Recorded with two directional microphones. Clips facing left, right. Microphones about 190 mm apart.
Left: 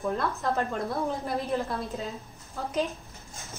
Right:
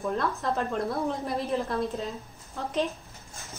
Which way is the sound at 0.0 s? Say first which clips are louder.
Even; centre (ahead or behind).